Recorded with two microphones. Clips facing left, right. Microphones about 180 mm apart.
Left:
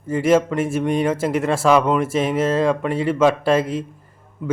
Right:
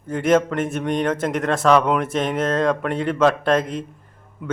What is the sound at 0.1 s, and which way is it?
Speech, 5° left (ahead or behind).